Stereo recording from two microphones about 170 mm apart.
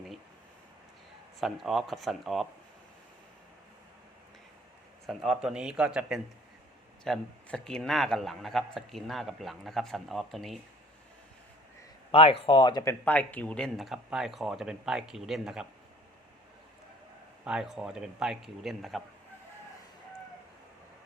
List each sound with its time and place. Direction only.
1.4 s speech: centre (ahead or behind)
5.0 s speech: centre (ahead or behind)
12.1 s speech: 35° left (ahead or behind)
12.8 s speech: 10° left (ahead or behind)
17.4 s speech: 5° right (ahead or behind)